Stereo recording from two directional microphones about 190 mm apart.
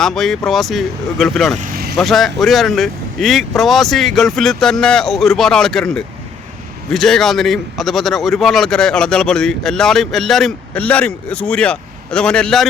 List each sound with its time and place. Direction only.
0.0 s a man's voice: centre (ahead or behind)
1.5 s vehicle: 45° right (ahead or behind)
2.0 s a man's voice: centre (ahead or behind)